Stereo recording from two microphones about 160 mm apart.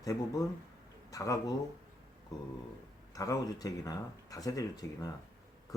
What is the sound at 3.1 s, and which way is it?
Speech, 20° left (ahead or behind).